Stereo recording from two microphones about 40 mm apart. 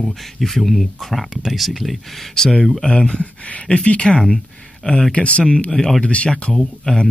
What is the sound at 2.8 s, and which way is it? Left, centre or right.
Speech, left.